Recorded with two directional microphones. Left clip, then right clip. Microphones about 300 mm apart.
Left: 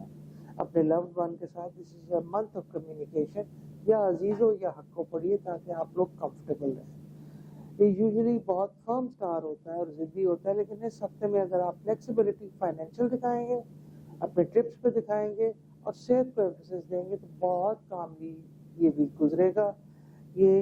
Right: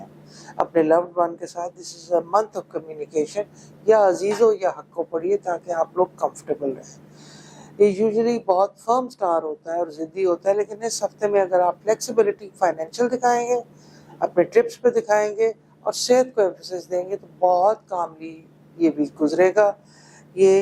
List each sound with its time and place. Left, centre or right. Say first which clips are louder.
0.4 s speech: right 8 dB; centre
2.9 s speech: right 7 dB; right
3.8 s speech: right 9 dB; centre
8.5 s speech: right 11 dB; right